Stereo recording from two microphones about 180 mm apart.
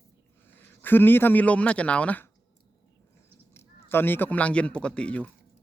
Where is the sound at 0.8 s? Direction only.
10° left (ahead or behind).